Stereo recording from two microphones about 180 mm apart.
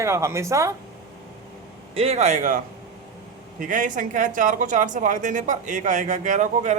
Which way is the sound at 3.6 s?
45° right (ahead or behind).